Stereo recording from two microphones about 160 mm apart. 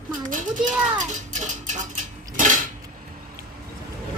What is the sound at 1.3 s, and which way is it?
Dishes, 50° right (ahead or behind).